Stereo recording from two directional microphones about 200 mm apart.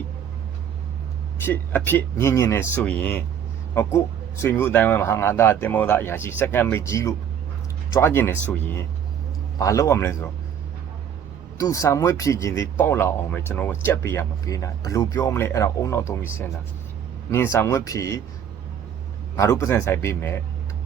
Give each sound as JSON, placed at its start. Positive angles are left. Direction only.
{"t": 1.5, "sound": "speech", "side_deg": 10}
{"t": 11.5, "sound": "speech", "side_deg": 15}
{"t": 19.4, "sound": "speech", "side_deg": 15}